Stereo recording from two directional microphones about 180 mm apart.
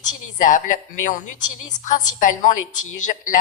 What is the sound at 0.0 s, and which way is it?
A woman's voice, 45° left (ahead or behind).